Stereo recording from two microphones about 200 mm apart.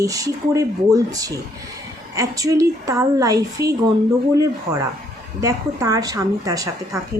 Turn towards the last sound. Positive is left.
turn(degrees=-15)  # may be behind; listen again after turning